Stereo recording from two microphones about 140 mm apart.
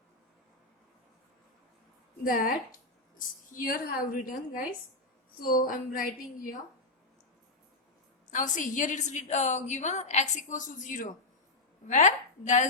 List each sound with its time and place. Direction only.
2.2 s a woman's voice: 90° left
8.3 s a woman's voice: 65° left (ahead or behind)